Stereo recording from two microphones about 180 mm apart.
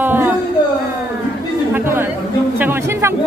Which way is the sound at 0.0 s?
10° right (ahead or behind).